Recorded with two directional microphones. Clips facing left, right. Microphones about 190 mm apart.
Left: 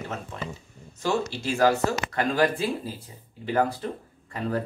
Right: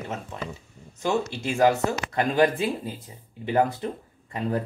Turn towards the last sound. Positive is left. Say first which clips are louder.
# right 2 dB
turn(degrees=-20)  # may be behind; listen again after turning